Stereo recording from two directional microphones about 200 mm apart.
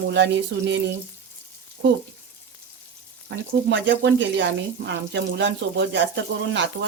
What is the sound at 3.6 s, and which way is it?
Speech, 60° right (ahead or behind).